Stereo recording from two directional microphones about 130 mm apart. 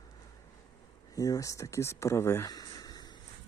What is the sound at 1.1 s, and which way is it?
Speech, 25° left (ahead or behind).